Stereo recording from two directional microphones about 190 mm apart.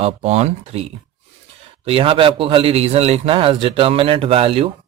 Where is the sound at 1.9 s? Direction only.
30° right (ahead or behind).